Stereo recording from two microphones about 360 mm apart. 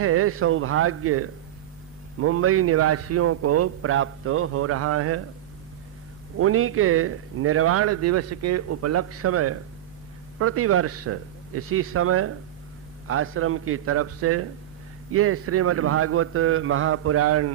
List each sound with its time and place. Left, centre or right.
0.0 s speech: right
6.4 s speech: right